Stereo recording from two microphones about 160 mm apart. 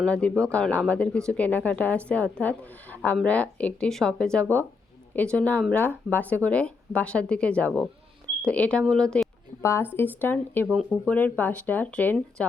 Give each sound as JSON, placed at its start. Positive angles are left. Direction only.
{"t": 0.0, "sound": "a woman's voice", "side_deg": 5}
{"t": 9.6, "sound": "speech", "side_deg": 15}